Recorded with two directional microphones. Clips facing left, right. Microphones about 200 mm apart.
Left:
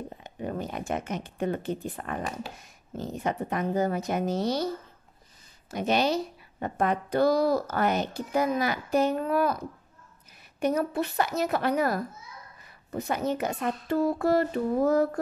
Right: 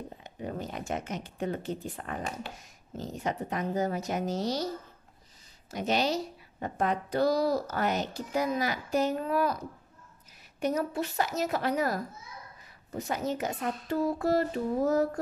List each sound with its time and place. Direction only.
0.4 s a woman's voice: 55° left (ahead or behind)
5.7 s a woman's voice: 55° left (ahead or behind)
10.6 s a woman's voice: 60° left (ahead or behind)